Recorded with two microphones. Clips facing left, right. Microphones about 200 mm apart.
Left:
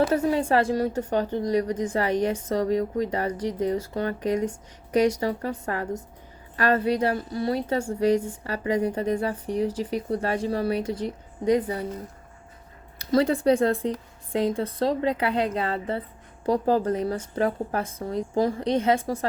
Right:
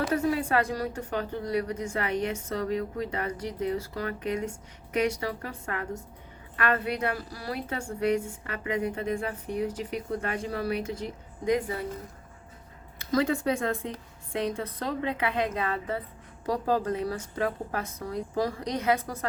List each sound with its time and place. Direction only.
0.0 s a woman's voice: 30° left (ahead or behind)
13.0 s a woman's voice: 35° left (ahead or behind)